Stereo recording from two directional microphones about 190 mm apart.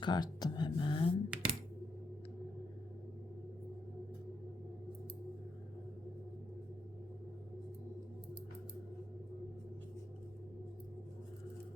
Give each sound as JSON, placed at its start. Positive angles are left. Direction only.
{"t": 0.0, "sound": "speech", "side_deg": 25}
{"t": 1.3, "sound": "computer keyboard", "side_deg": -5}